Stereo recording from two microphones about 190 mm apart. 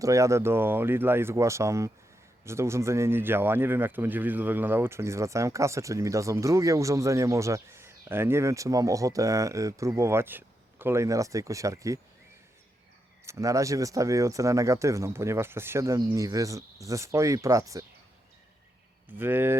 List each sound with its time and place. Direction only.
0.0 s speech: 15° right (ahead or behind)
13.2 s speech: 15° right (ahead or behind)
19.1 s speech: 10° right (ahead or behind)